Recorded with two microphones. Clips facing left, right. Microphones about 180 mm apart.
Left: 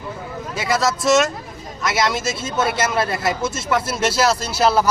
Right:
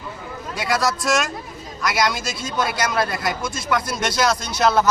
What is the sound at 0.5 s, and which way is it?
Speech, centre (ahead or behind).